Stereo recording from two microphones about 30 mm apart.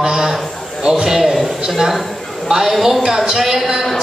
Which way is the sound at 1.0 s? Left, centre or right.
Centre.